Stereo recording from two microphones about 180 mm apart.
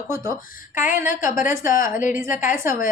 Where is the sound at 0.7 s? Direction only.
45° left (ahead or behind).